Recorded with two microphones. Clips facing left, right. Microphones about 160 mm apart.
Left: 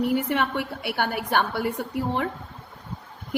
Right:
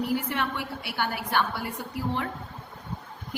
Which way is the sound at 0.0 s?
55° left (ahead or behind).